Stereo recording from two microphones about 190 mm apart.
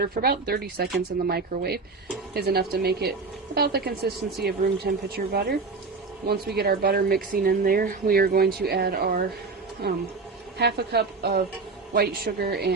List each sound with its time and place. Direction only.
0.0 s speech: 55° right (ahead or behind)
10.6 s speech: 60° right (ahead or behind)